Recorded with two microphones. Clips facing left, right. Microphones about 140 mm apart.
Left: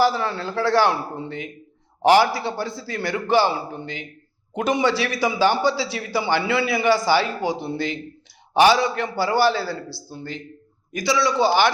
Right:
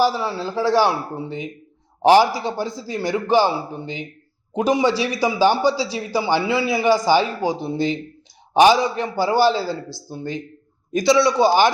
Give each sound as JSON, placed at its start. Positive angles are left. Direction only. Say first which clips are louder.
{"t": 0.0, "sound": "a man's voice", "louder": "right 1 dB", "side_deg": -10}